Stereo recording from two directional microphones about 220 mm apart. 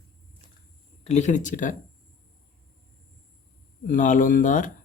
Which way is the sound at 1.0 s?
30° left (ahead or behind).